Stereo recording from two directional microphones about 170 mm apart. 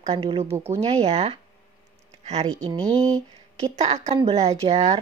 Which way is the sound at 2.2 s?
40° right (ahead or behind).